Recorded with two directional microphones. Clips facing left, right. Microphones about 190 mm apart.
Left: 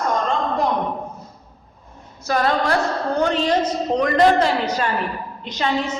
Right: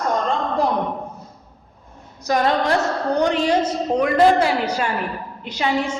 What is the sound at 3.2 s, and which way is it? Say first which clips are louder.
A woman's voice: right 1 dB; 15° right (ahead or behind).